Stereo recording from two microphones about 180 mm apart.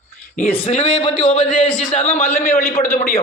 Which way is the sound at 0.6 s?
35° left (ahead or behind).